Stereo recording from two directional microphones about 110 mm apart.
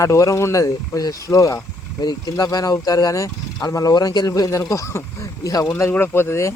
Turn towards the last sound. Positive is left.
turn(degrees=25)  # may be behind; listen again after turning